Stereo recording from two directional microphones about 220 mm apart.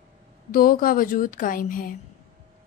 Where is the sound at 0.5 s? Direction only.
40° left (ahead or behind).